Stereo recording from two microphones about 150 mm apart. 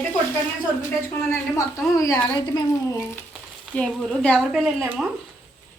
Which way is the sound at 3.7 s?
5° left (ahead or behind).